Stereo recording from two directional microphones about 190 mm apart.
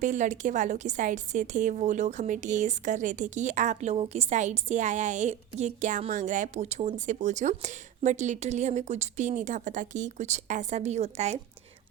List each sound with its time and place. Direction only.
0.0 s a woman's voice: 40° right (ahead or behind)